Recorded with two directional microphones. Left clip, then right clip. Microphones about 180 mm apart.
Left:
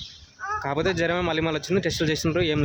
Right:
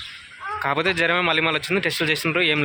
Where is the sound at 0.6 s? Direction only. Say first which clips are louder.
Right 4 dB; 20° left (ahead or behind).